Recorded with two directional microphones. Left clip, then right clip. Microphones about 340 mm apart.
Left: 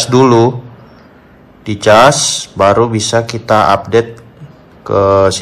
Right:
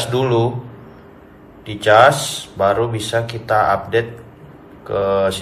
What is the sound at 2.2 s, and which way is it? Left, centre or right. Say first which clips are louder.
A man's voice: left 7 dB; centre.